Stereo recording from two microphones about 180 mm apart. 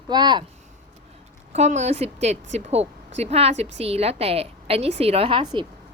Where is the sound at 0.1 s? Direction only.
25° right (ahead or behind).